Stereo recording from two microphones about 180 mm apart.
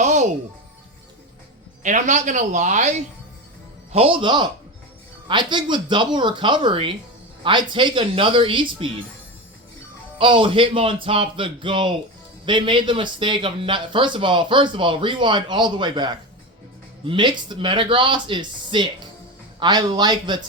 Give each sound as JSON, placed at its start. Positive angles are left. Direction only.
{"t": 0.0, "sound": "music", "side_deg": -40}
{"t": 1.8, "sound": "speech", "side_deg": -45}
{"t": 3.9, "sound": "speech", "side_deg": -30}
{"t": 10.2, "sound": "speech", "side_deg": -30}